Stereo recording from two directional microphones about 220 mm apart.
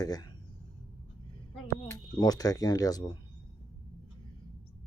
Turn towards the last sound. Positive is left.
turn(degrees=15)  # may be behind; listen again after turning